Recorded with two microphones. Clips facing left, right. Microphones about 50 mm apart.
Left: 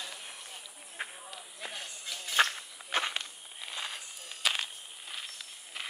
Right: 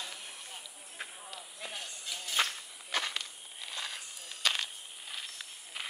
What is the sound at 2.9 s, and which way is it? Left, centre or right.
Walk, left.